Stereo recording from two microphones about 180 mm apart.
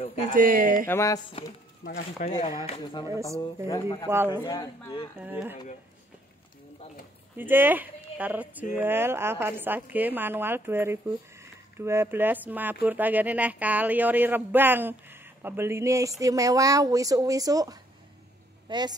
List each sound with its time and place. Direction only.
0.3 s speech: 50° right (ahead or behind)
0.8 s speech: 15° left (ahead or behind)
1.9 s speech: 50° left (ahead or behind)
2.8 s a woman's voice: 25° left (ahead or behind)
5.2 s speech: 10° right (ahead or behind)
7.3 s a woman's voice: 10° right (ahead or behind)